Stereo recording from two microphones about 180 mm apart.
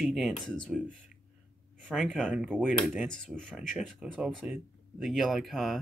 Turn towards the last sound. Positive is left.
turn(degrees=0)  # may be behind; listen again after turning